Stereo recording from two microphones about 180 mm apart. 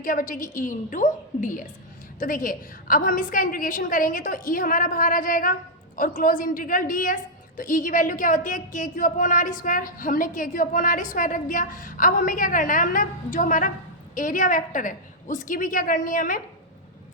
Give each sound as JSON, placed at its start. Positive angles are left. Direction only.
{"t": 0.0, "sound": "a woman's voice", "side_deg": 50}